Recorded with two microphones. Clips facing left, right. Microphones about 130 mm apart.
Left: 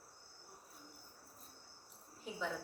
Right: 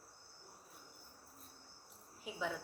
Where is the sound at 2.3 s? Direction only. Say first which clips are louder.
Left 1 dB; 5° right (ahead or behind).